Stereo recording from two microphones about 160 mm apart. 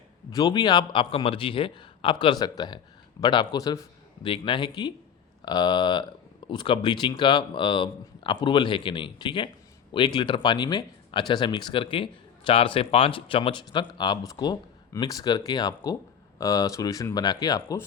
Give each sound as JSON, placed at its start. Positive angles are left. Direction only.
{"t": 0.3, "sound": "speech", "side_deg": 25}